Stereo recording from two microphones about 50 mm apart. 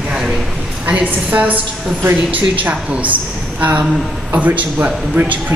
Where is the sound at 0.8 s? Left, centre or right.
Right.